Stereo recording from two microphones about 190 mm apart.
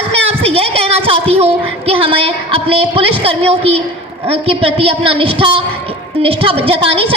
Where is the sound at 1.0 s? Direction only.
30° right (ahead or behind).